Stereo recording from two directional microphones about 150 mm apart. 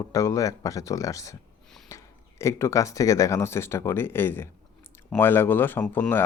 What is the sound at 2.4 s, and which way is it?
Speech, 20° left (ahead or behind).